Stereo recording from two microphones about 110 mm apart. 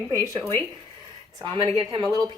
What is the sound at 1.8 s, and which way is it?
Speech, 45° right (ahead or behind).